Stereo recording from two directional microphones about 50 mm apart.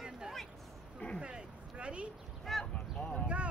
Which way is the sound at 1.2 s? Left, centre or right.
Right.